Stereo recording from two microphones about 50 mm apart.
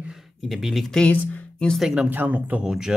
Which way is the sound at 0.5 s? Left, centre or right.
Centre.